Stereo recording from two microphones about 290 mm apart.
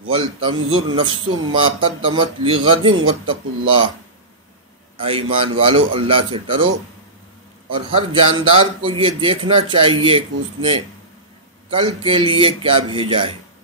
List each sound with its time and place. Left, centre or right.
0.1 s a man's voice: centre
0.6 s a man's voice: right
0.9 s a man's voice: centre
2.9 s a man's voice: right
3.3 s a man's voice: centre
4.9 s a man's voice: centre
7.7 s a man's voice: centre